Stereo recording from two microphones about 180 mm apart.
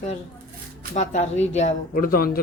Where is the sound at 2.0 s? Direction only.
55° left (ahead or behind).